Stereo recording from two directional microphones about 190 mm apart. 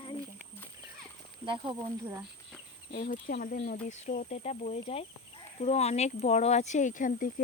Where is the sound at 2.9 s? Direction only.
50° left (ahead or behind).